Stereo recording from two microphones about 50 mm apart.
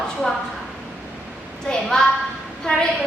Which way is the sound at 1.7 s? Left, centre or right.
Centre.